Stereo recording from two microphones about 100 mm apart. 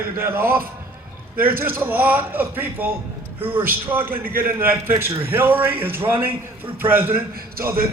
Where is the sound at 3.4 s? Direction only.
60° right (ahead or behind).